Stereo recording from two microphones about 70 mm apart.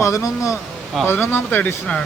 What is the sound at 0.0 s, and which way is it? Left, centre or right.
Speech, left.